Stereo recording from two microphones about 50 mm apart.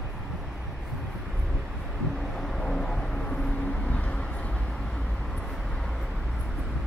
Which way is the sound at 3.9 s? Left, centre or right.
Left.